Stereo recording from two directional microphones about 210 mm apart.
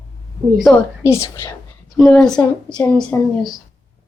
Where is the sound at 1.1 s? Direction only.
15° left (ahead or behind).